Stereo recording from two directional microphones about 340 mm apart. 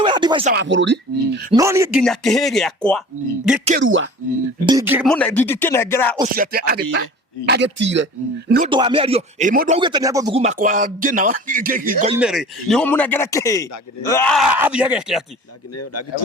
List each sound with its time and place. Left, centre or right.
0.0 s speech: centre
0.5 s speech: right
1.5 s speech: centre
3.7 s speech: right
4.6 s speech: centre
6.3 s speech: right
8.7 s speech: centre
12.1 s speech: centre